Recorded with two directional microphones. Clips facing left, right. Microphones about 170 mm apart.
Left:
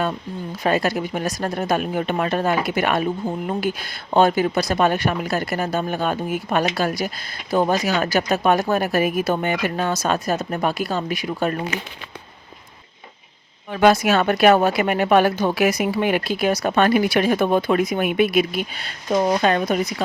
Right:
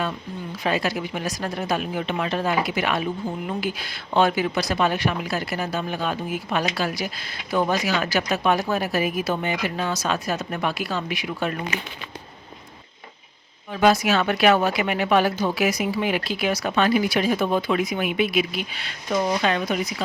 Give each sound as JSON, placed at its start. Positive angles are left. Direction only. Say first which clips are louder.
{"t": 0.6, "sound": "speech", "louder": "left 4 dB", "side_deg": 50}
{"t": 13.7, "sound": "speech", "louder": "left 3 dB", "side_deg": 60}
{"t": 19.1, "sound": "speech", "louder": "left 4 dB", "side_deg": 35}